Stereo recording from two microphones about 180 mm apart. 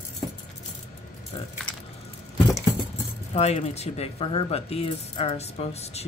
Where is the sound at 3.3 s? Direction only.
35° left (ahead or behind).